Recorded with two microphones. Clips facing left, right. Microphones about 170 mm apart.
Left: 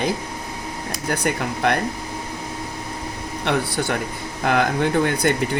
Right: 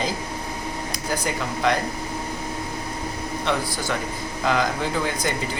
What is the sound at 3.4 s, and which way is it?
Speech, 60° left (ahead or behind).